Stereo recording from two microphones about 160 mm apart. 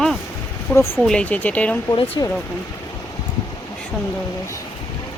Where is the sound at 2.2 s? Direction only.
25° left (ahead or behind).